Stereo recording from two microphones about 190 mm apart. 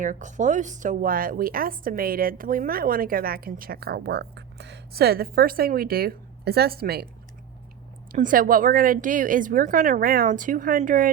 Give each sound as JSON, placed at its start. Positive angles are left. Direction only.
{"t": 0.0, "sound": "a woman's voice", "side_deg": -40}
{"t": 8.1, "sound": "a woman's voice", "side_deg": -45}